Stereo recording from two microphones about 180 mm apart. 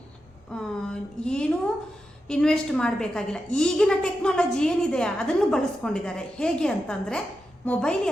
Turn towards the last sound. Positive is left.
turn(degrees=5)  # may be behind; listen again after turning